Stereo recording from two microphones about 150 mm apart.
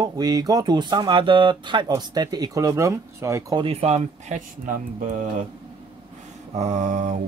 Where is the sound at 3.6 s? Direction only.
40° right (ahead or behind); by 5.2 s 60° right (ahead or behind).